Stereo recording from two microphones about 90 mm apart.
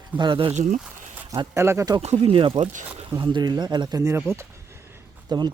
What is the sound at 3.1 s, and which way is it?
Speech, 60° right (ahead or behind).